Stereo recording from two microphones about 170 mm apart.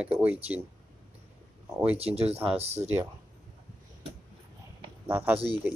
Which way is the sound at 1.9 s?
35° right (ahead or behind).